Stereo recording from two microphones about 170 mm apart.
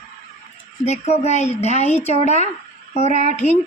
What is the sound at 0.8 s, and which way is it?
Speech, 40° left (ahead or behind).